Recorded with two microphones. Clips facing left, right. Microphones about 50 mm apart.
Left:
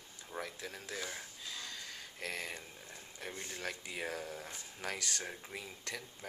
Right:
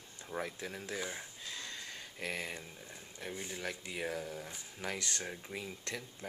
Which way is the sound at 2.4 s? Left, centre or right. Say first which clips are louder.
Right 1 dB; centre.